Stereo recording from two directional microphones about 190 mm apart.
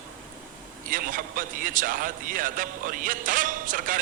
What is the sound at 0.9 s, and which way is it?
A man's voice, 45° right (ahead or behind).